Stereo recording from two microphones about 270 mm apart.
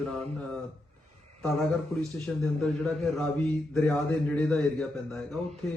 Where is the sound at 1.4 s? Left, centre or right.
Centre.